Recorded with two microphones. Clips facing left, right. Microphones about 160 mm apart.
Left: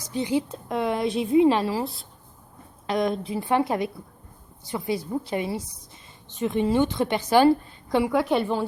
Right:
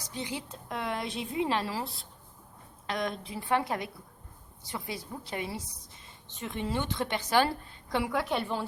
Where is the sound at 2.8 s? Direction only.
15° left (ahead or behind).